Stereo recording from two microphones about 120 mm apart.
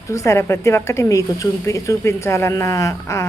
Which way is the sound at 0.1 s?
25° left (ahead or behind).